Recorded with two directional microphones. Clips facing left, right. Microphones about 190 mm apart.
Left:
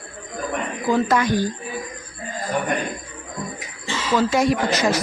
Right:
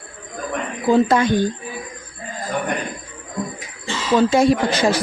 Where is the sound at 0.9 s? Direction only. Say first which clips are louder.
Right 4 dB; 25° right (ahead or behind).